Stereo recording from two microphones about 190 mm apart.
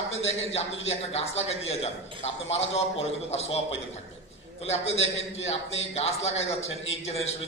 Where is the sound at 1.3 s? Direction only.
35° left (ahead or behind).